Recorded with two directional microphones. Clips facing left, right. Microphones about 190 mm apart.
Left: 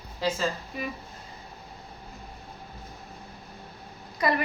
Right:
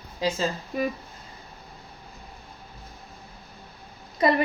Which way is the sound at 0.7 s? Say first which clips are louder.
Right 8 dB; 45° right (ahead or behind).